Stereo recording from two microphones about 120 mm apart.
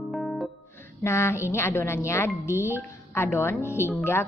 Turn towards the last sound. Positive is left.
turn(degrees=20)  # may be behind; listen again after turning